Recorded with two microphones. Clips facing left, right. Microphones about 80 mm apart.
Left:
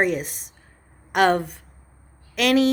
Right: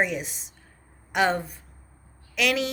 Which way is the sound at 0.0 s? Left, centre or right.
Left.